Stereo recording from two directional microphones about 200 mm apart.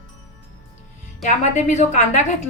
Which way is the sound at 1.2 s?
35° left (ahead or behind).